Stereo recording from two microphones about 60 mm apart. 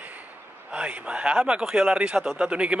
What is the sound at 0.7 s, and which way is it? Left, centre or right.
Speech, centre.